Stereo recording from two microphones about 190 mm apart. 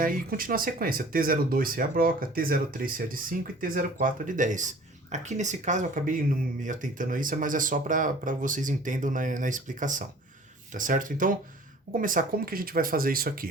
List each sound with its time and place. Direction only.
0.0 s speech: 50° right (ahead or behind)